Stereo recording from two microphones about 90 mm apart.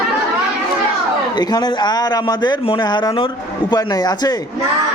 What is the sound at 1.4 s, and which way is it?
Speech, 50° left (ahead or behind).